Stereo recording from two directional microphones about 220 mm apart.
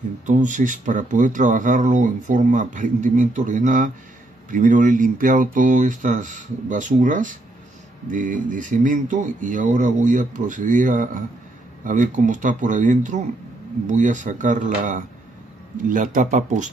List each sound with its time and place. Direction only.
0.3 s speech: 35° right (ahead or behind)